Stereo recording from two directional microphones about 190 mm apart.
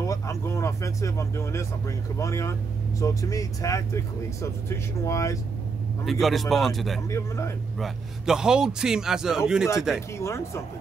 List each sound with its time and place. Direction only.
0.0 s speech: 15° left (ahead or behind)
6.0 s a man's voice: centre (ahead or behind)
7.1 s speech: 15° left (ahead or behind)
7.8 s a man's voice: 5° right (ahead or behind)
10.2 s speech: 15° left (ahead or behind)